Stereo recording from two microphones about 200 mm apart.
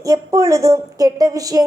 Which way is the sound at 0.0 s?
15° right (ahead or behind).